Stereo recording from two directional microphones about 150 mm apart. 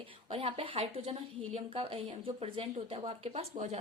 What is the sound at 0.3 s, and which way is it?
A woman's voice, 40° right (ahead or behind).